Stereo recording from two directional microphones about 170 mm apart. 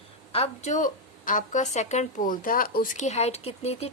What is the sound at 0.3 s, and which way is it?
Speech, 40° left (ahead or behind).